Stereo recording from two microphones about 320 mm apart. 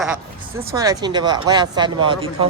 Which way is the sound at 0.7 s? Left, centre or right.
Centre.